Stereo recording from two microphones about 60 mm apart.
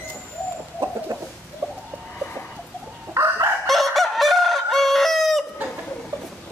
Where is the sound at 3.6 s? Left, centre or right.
Centre.